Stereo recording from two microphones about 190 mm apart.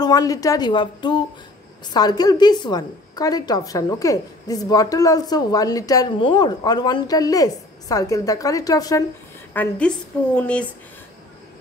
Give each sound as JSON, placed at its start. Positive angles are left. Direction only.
{"t": 0.0, "sound": "a woman's voice", "side_deg": 20}
{"t": 9.5, "sound": "a woman's voice", "side_deg": 10}